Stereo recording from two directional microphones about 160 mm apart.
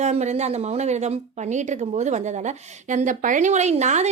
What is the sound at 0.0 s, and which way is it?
A woman's voice, 45° right (ahead or behind).